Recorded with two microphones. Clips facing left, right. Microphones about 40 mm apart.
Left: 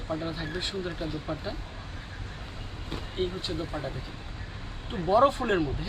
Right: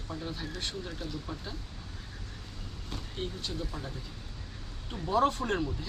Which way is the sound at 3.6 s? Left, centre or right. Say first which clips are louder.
Left 6 dB; left.